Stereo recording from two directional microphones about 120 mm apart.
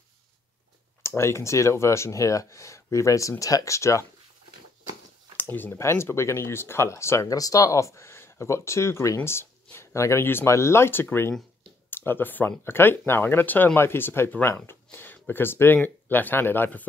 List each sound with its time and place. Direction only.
1.0 s speech: 20° left (ahead or behind)
5.4 s speech: 15° left (ahead or behind)